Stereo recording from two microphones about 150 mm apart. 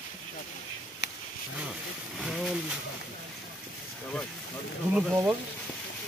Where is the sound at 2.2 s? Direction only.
Centre (ahead or behind).